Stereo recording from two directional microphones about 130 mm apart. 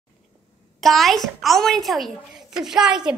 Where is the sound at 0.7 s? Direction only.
Centre (ahead or behind).